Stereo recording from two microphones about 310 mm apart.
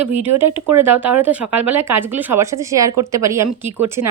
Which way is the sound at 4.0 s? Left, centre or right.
Right.